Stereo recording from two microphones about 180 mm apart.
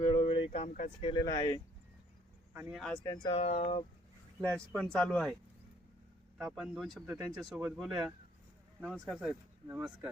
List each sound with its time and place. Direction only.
0.1 s a sound: 30° left (ahead or behind)
1.0 s speech: 20° left (ahead or behind)
2.5 s speech: 10° right (ahead or behind)
3.0 s speech: 25° left (ahead or behind)
3.4 s speech: 35° left (ahead or behind)
4.4 s speech: 5° left (ahead or behind)
6.4 s speech: centre (ahead or behind)